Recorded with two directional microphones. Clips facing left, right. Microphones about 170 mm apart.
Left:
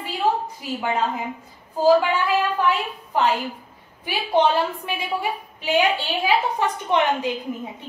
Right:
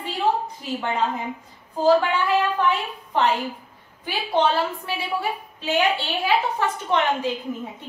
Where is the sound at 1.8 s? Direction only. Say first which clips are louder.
Left 1 dB; 10° left (ahead or behind).